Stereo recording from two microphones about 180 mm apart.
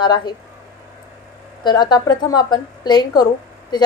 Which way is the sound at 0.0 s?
25° left (ahead or behind).